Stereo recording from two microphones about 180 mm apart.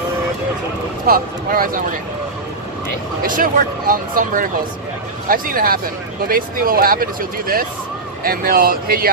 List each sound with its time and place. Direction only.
1.0 s speech: 55° right (ahead or behind)
3.2 s speech: 50° right (ahead or behind)